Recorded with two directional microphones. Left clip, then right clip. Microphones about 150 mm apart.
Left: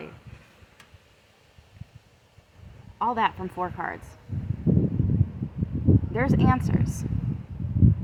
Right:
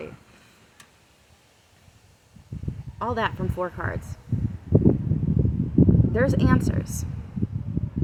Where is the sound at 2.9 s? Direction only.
5° left (ahead or behind).